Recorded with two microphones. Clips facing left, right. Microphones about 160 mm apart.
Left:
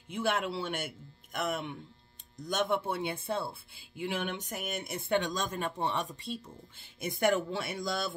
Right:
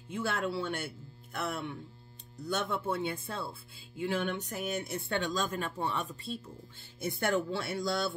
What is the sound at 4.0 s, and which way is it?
Speech, 15° left (ahead or behind).